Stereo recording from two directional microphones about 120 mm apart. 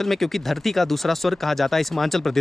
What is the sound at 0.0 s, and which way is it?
Speech, centre (ahead or behind).